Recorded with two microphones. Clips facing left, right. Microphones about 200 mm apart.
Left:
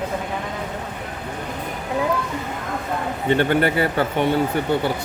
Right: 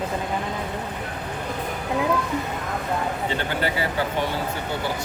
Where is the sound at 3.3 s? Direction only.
60° left (ahead or behind).